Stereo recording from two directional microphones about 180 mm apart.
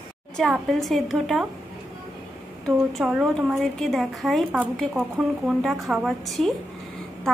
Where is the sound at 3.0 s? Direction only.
5° right (ahead or behind).